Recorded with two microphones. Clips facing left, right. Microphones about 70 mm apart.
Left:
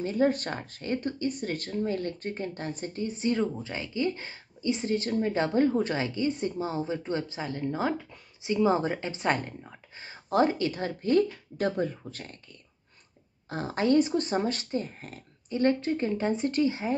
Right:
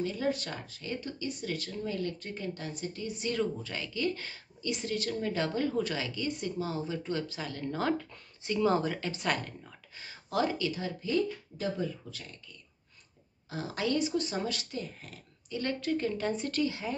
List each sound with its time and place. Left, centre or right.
0.0 s speech: left
13.5 s speech: left